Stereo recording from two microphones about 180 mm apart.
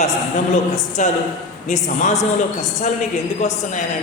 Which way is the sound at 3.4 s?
40° left (ahead or behind).